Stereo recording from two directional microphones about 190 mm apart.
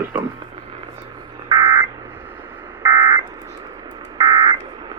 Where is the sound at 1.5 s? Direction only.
20° right (ahead or behind).